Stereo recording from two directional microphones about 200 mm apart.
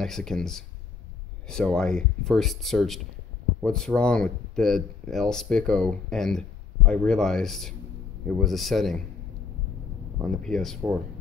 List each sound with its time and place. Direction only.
0.0 s speech: centre (ahead or behind)
10.2 s speech: centre (ahead or behind)